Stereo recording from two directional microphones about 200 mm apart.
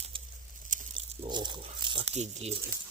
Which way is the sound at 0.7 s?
40° right (ahead or behind).